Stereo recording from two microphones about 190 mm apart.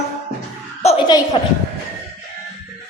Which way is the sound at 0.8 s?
35° left (ahead or behind).